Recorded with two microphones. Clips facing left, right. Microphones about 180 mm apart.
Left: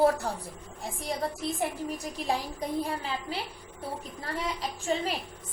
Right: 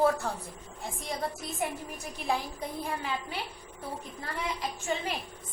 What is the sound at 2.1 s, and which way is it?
A woman's voice, 35° left (ahead or behind).